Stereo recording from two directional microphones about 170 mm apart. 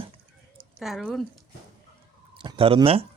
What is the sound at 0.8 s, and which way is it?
Speech, centre (ahead or behind).